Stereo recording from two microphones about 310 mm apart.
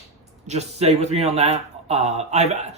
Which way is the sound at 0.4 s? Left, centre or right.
Right.